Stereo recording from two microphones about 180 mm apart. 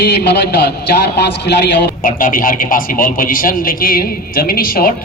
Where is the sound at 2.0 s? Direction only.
50° left (ahead or behind).